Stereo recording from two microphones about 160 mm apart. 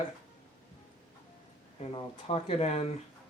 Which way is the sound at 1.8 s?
35° left (ahead or behind).